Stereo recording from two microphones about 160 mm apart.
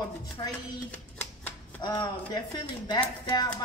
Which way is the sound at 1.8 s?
25° left (ahead or behind).